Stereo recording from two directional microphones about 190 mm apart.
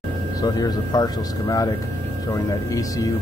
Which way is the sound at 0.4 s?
20° left (ahead or behind).